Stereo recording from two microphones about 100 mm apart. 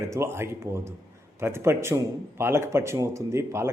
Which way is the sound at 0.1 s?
25° right (ahead or behind).